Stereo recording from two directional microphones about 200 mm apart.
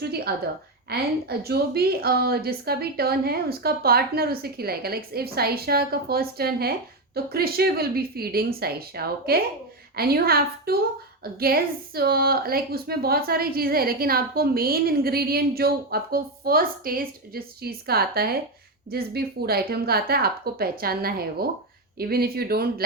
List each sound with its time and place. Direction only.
0.9 s a woman's voice: 55° right (ahead or behind)